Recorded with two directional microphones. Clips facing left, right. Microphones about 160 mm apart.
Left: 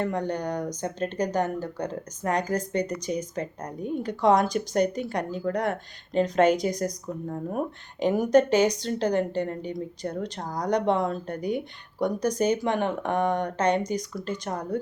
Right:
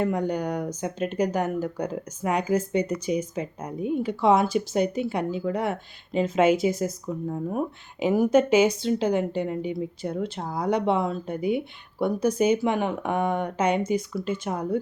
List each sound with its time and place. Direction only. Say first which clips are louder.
0.0 s speech: right 2 dB; 10° right (ahead or behind)